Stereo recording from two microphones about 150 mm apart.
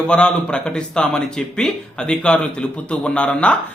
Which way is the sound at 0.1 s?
5° left (ahead or behind).